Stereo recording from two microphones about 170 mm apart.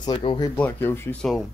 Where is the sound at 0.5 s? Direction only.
10° left (ahead or behind).